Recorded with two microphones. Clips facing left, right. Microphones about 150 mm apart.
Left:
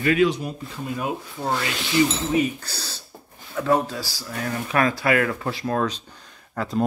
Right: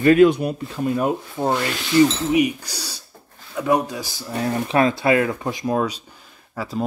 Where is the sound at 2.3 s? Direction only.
15° right (ahead or behind).